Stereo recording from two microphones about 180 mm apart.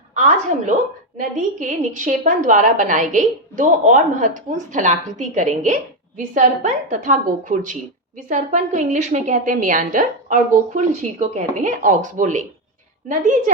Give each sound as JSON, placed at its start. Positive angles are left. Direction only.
{"t": 0.1, "sound": "a woman's voice", "side_deg": -40}